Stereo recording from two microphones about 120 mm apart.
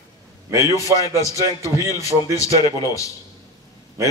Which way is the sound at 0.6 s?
30° left (ahead or behind).